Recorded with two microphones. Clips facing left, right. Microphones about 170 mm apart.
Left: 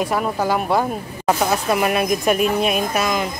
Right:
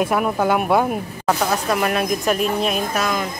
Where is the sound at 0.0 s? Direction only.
Centre (ahead or behind).